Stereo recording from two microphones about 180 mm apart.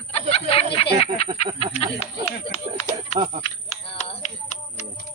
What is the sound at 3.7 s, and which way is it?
Music, 35° left (ahead or behind).